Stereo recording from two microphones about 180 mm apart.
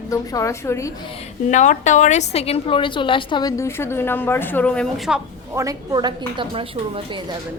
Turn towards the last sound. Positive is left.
turn(degrees=-30)  # may be behind; listen again after turning